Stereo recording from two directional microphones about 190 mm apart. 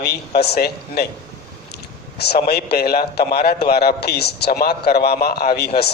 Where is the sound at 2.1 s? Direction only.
60° left (ahead or behind).